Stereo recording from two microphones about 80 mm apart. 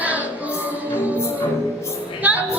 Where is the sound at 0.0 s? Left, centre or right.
Centre.